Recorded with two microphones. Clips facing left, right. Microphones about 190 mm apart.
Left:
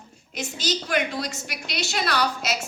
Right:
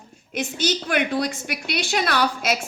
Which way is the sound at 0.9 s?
60° right (ahead or behind).